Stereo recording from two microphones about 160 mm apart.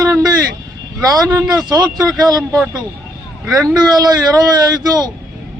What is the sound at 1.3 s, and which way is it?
Speech, 20° right (ahead or behind).